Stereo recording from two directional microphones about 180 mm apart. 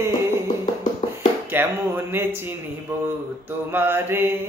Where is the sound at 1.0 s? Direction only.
35° left (ahead or behind).